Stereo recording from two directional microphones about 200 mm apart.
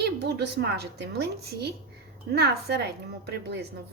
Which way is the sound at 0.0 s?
55° right (ahead or behind).